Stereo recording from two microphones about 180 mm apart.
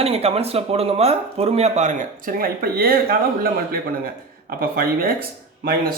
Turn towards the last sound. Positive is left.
turn(degrees=-55)  # may be behind; listen again after turning